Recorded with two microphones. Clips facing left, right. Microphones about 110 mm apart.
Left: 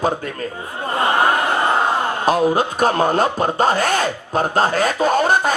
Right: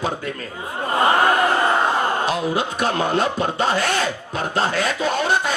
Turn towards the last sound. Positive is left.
turn(degrees=45)  # may be behind; listen again after turning